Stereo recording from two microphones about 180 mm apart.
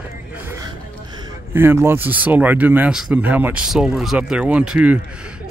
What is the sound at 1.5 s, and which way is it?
Speech, 10° right (ahead or behind).